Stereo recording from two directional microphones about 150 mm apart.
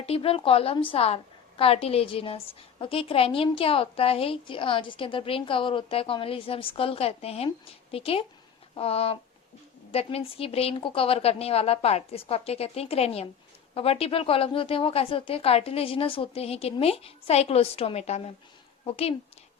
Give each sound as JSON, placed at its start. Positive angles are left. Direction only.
{"t": 0.0, "sound": "a woman's voice", "side_deg": 40}